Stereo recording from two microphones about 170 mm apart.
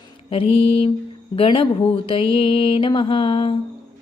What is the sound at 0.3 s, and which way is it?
A woman's voice, 35° left (ahead or behind).